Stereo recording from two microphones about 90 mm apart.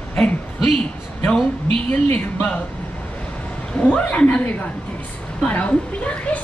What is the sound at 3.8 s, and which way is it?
A woman's voice, 10° left (ahead or behind).